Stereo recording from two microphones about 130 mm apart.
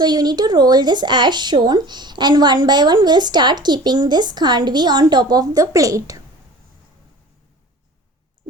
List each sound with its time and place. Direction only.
0.0 s speech: 30° right (ahead or behind)